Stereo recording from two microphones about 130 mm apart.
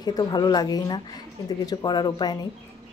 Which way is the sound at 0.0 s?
30° left (ahead or behind).